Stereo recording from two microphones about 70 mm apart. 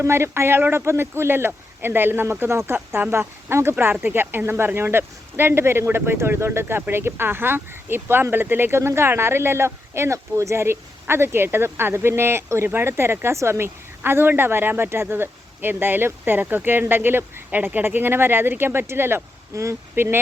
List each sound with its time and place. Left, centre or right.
0.0 s speech: right
19.5 s speech: right
20.0 s speech: right